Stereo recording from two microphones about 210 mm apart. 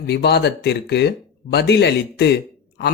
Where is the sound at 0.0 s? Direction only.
50° left (ahead or behind).